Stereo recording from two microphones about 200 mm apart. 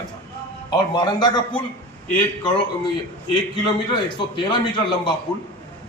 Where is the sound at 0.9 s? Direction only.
20° left (ahead or behind).